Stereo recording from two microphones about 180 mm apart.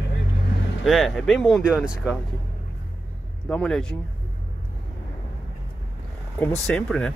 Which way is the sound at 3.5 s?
5° left (ahead or behind).